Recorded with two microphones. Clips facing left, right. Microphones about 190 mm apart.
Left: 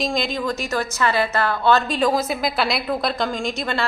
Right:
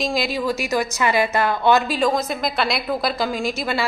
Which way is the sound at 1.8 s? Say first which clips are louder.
Even; centre (ahead or behind).